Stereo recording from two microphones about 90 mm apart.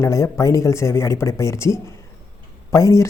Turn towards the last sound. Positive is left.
turn(degrees=35)  # may be behind; listen again after turning